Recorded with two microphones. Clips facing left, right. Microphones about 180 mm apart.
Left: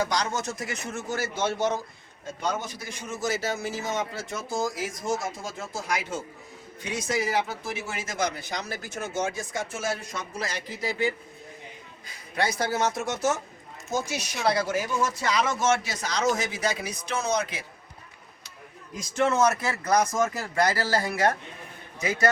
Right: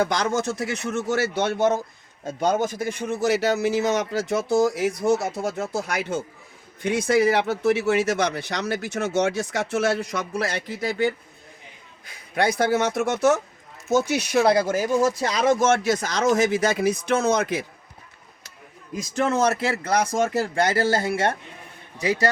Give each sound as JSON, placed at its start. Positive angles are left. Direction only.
{"t": 0.0, "sound": "speech", "side_deg": -55}
{"t": 2.2, "sound": "a man's voice", "side_deg": -45}
{"t": 12.4, "sound": "a man's voice", "side_deg": -60}
{"t": 19.2, "sound": "speech", "side_deg": -30}